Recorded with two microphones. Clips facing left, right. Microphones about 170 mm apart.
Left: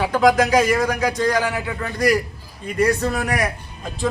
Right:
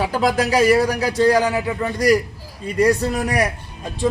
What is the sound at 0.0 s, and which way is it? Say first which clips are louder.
A man's voice: left 3 dB; 35° right (ahead or behind).